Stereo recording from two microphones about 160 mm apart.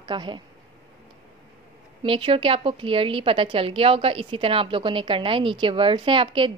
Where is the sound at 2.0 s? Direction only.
35° right (ahead or behind).